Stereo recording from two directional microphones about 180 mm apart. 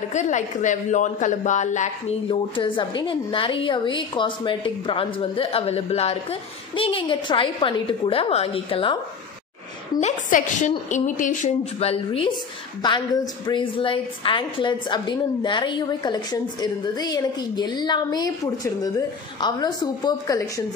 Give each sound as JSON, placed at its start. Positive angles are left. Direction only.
{"t": 0.1, "sound": "speech", "side_deg": 40}
{"t": 2.2, "sound": "a woman's voice", "side_deg": 25}
{"t": 9.9, "sound": "a woman's voice", "side_deg": 45}